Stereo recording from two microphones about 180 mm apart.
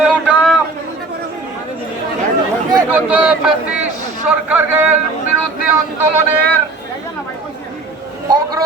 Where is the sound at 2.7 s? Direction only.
10° right (ahead or behind).